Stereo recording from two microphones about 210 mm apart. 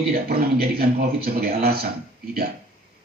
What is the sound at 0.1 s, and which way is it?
A man's voice, 45° right (ahead or behind).